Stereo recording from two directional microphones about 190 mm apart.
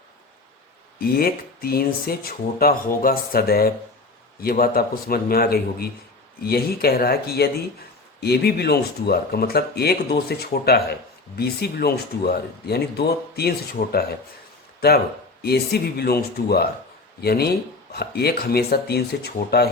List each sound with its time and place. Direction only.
0.9 s speech: 55° left (ahead or behind)